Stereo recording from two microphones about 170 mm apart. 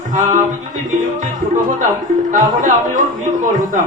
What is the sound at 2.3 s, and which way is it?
Music, 50° right (ahead or behind).